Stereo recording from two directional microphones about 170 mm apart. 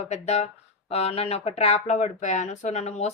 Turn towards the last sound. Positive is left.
turn(degrees=40)  # may be behind; listen again after turning